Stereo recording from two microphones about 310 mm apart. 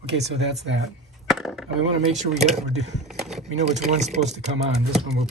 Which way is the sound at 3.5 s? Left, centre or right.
Right.